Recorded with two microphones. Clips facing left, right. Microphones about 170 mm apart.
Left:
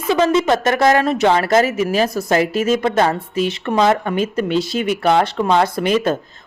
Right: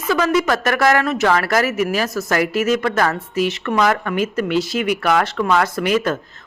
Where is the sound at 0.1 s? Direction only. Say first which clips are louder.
Left 2 dB; 25° left (ahead or behind).